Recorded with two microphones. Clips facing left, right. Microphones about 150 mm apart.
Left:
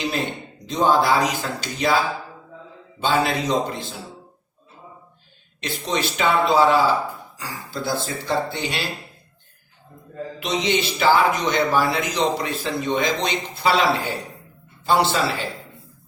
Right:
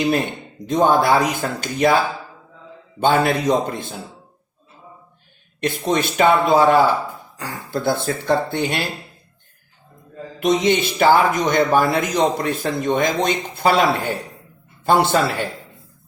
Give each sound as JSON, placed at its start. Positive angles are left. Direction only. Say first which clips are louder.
{"t": 0.6, "sound": "speech", "louder": "right 3 dB", "side_deg": -55}
{"t": 3.0, "sound": "speech", "louder": "right 4 dB", "side_deg": -55}
{"t": 5.5, "sound": "speech", "louder": "right 5 dB", "side_deg": -50}
{"t": 10.4, "sound": "speech", "louder": "right 6 dB", "side_deg": -50}